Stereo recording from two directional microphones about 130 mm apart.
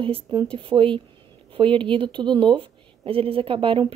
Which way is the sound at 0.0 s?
40° right (ahead or behind).